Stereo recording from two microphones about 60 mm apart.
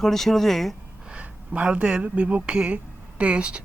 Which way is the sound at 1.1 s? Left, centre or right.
Right.